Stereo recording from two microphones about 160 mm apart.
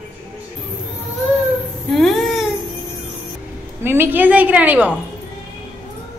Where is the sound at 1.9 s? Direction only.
Centre (ahead or behind).